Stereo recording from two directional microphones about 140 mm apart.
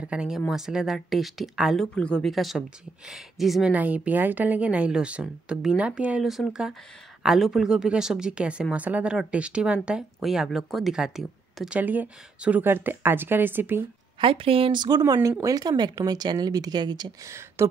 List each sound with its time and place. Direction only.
0.0 s speech: 5° right (ahead or behind)
14.2 s speech: 40° right (ahead or behind); by 17.6 s 20° right (ahead or behind)